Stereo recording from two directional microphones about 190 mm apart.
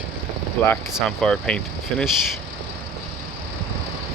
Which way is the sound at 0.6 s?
10° left (ahead or behind).